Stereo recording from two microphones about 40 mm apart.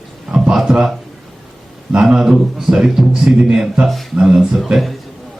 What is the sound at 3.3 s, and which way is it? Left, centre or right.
Speech, right.